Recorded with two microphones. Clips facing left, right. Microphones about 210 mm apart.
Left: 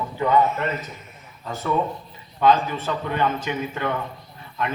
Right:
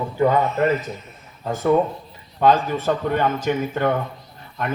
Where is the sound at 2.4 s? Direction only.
45° right (ahead or behind).